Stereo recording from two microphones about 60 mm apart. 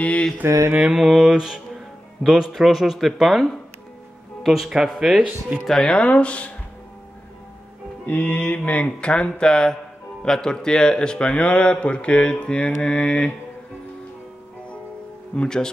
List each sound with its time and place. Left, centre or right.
0.0 s mantra: centre
0.7 s speech: centre
5.7 s speech: centre
8.1 s speech: left
15.3 s speech: centre